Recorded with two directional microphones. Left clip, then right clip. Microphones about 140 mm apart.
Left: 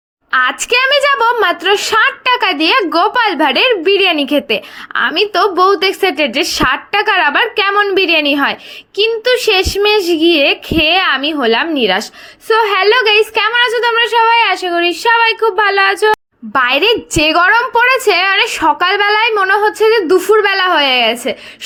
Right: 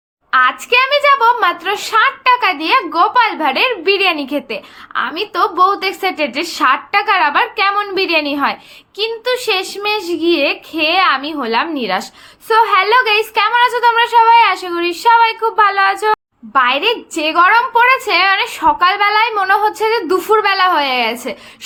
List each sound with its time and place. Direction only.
0.3 s a woman's voice: 90° left; by 12.0 s 45° left (ahead or behind)
12.5 s a woman's voice: 30° left (ahead or behind)
16.5 s a woman's voice: 70° left (ahead or behind); by 21.3 s 35° left (ahead or behind)